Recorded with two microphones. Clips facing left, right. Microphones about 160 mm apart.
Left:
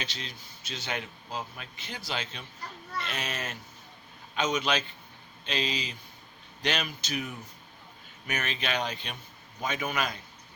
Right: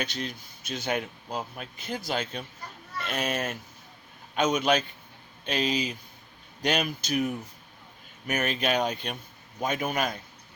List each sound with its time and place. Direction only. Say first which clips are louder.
0.0 s speech: right 7 dB; 50° right (ahead or behind)